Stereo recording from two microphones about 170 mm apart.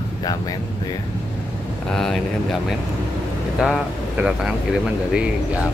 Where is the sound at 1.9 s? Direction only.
Centre (ahead or behind).